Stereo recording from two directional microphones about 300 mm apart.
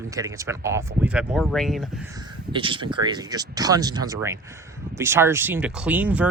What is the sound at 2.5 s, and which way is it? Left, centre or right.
Speech, centre.